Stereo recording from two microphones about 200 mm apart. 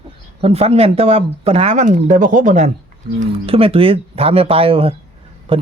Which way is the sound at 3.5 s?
30° right (ahead or behind).